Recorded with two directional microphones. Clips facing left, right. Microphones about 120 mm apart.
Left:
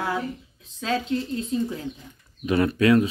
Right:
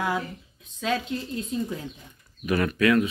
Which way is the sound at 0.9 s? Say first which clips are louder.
Left 4 dB; 30° left (ahead or behind).